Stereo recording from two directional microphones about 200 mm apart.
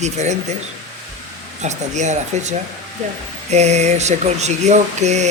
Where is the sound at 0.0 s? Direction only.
35° right (ahead or behind).